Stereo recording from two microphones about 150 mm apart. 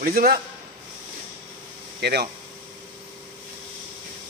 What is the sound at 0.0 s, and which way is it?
Speech, 90° right.